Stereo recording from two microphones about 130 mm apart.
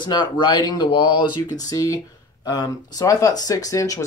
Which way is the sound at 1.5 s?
25° left (ahead or behind).